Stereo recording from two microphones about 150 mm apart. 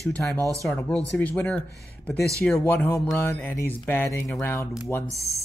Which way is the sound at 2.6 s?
15° left (ahead or behind).